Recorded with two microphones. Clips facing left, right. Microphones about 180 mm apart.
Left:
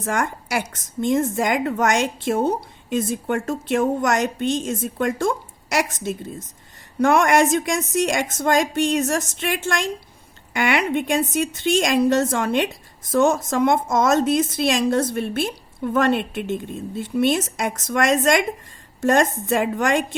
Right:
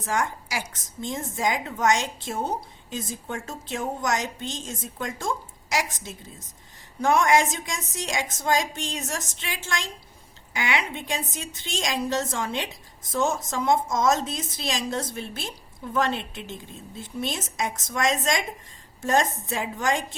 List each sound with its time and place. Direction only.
0.0 s a woman's voice: 60° left (ahead or behind)